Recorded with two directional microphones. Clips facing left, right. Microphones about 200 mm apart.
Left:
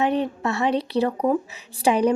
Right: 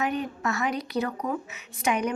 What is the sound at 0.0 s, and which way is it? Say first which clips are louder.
A woman's voice: left 6 dB; 30° left (ahead or behind).